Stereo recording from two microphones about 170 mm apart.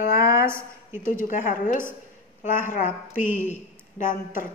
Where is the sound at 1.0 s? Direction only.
50° left (ahead or behind).